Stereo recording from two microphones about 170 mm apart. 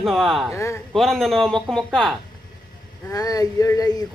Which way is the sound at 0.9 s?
Centre (ahead or behind).